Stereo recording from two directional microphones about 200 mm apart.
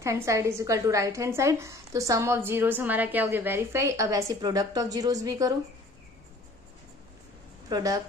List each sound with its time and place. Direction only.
0.0 s a woman's voice: 15° right (ahead or behind)
7.7 s a woman's voice: 15° right (ahead or behind)